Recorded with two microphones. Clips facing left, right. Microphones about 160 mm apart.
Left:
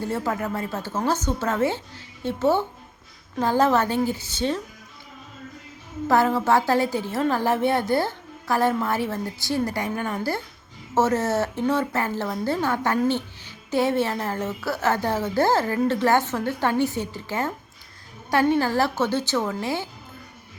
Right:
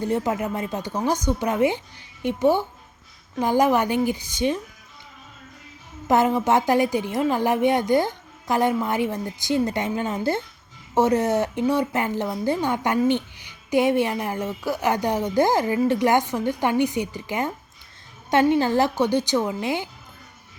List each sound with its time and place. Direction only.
0.0 s a woman's voice: 20° right (ahead or behind)
6.1 s a woman's voice: 20° right (ahead or behind)